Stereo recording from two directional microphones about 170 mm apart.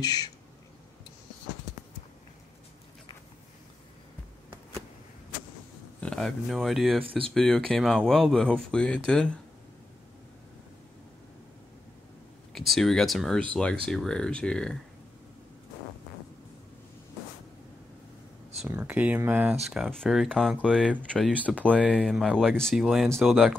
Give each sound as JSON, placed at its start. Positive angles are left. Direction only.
{"t": 0.0, "sound": "a sound", "side_deg": 25}
{"t": 5.9, "sound": "speech", "side_deg": 5}
{"t": 7.1, "sound": "speech", "side_deg": -30}
{"t": 7.3, "sound": "speech", "side_deg": 5}
{"t": 12.5, "sound": "speech", "side_deg": 0}
{"t": 18.7, "sound": "speech", "side_deg": -10}
{"t": 19.7, "sound": "speech", "side_deg": 0}